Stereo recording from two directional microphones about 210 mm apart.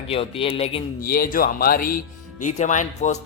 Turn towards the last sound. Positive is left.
turn(degrees=35)  # may be behind; listen again after turning